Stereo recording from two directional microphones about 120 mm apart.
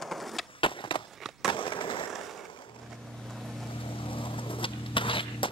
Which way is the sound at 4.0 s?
45° left (ahead or behind).